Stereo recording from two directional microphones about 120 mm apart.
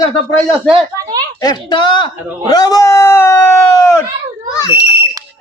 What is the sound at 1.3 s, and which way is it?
A man's voice, 35° left (ahead or behind).